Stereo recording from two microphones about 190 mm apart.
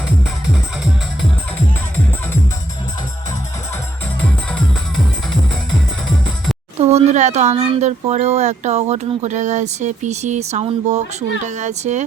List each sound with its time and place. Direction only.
6.7 s speech: 35° right (ahead or behind)